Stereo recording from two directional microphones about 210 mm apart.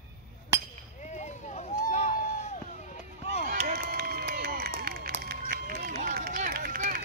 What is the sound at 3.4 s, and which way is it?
Run, 35° right (ahead or behind).